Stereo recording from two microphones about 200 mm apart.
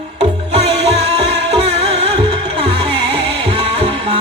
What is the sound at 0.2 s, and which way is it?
Music, 30° right (ahead or behind).